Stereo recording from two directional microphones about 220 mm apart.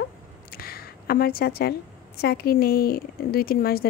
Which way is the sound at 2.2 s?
45° left (ahead or behind).